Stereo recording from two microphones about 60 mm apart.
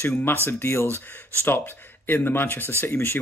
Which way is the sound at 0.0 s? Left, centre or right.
Left.